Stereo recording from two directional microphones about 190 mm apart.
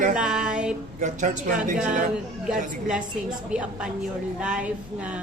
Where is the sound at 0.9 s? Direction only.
40° right (ahead or behind).